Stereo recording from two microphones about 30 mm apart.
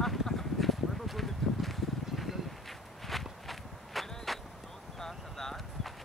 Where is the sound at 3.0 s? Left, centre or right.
Centre.